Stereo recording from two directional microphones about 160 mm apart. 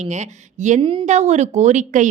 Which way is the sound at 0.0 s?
45° right (ahead or behind).